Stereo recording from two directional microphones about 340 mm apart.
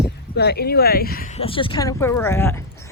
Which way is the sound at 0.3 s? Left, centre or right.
Left.